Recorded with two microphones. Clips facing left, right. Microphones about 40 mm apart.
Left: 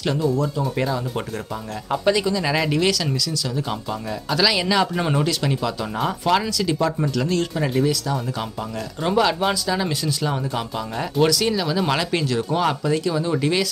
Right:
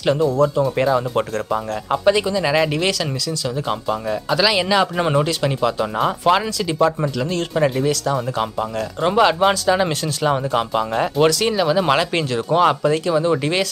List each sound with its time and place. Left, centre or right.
0.0 s speech: centre; by 8.2 s right
9.0 s speech: right